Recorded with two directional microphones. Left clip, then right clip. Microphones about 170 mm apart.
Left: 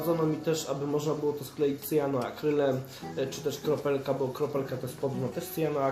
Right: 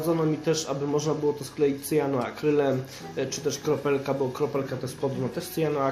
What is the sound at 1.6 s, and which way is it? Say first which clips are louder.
Speech: right 4 dB; 20° right (ahead or behind).